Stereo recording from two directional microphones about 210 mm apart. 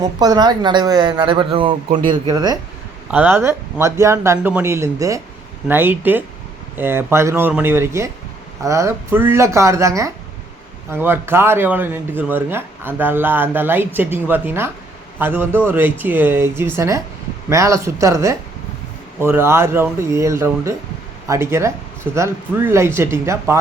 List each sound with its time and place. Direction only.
0.0 s speech: 20° right (ahead or behind)